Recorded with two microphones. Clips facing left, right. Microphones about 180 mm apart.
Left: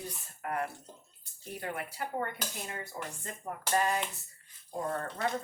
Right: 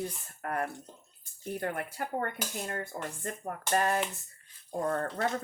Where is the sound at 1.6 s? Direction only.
50° right (ahead or behind).